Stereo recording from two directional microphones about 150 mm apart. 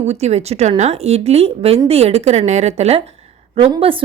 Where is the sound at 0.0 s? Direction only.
45° right (ahead or behind).